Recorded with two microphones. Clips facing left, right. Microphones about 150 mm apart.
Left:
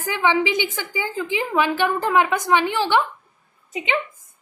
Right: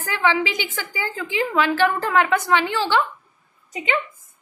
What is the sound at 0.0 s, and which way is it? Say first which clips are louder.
A woman's voice: left 1 dB; 20° left (ahead or behind).